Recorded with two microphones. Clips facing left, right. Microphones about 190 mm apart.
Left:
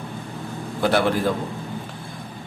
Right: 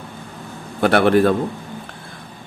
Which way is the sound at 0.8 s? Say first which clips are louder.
Right 6 dB; 65° right (ahead or behind).